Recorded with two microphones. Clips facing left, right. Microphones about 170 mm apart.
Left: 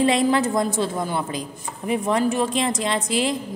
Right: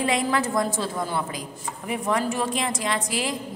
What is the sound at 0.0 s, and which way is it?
A woman's voice, 25° left (ahead or behind).